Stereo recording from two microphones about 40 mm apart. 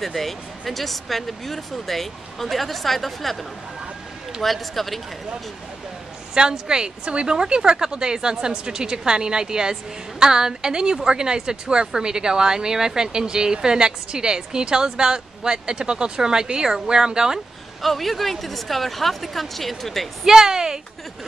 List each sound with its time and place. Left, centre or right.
0.0 s speech: centre
4.4 s speech: centre
6.3 s speech: centre
17.8 s speech: centre
20.2 s speech: centre